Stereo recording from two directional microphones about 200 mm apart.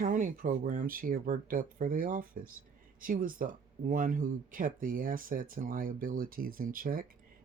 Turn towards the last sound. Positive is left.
turn(degrees=-45)  # may be behind; listen again after turning